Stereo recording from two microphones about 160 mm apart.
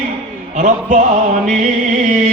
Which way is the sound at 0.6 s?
40° right (ahead or behind).